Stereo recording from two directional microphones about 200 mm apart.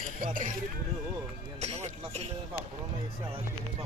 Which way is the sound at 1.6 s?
30° right (ahead or behind).